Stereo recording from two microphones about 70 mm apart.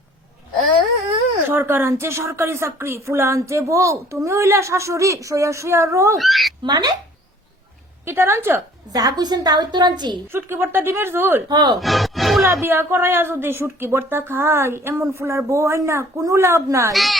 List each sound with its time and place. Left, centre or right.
1.5 s speech: right
6.1 s speech: centre
6.6 s speech: right
8.0 s speech: right
8.9 s a woman's voice: right
10.3 s speech: right
11.4 s speech: right
11.8 s speech: centre
12.6 s speech: right
16.9 s speech: centre